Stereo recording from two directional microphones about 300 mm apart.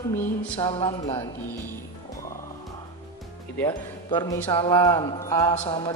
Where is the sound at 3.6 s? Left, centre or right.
Centre.